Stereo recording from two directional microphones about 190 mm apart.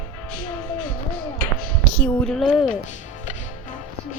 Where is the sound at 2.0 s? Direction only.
5° left (ahead or behind).